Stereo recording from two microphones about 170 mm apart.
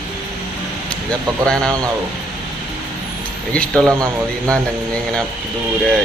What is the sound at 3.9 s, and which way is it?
Speech, 20° right (ahead or behind).